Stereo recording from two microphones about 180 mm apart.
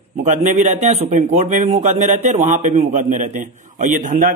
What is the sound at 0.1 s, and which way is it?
A man's voice, 40° right (ahead or behind).